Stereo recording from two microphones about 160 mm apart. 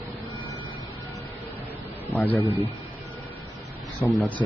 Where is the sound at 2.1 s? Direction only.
10° left (ahead or behind).